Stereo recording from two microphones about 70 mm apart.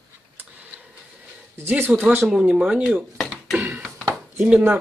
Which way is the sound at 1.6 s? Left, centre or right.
Right.